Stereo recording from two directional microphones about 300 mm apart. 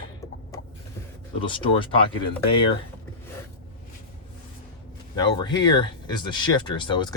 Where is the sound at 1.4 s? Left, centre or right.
Centre.